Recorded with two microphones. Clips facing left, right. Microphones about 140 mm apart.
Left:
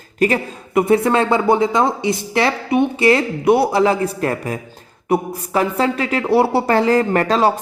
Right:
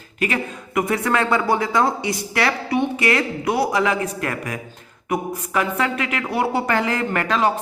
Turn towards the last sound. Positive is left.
turn(degrees=35)  # may be behind; listen again after turning